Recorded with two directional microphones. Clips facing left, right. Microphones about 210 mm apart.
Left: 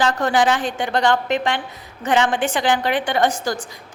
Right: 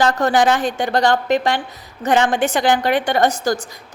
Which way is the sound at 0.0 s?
40° right (ahead or behind).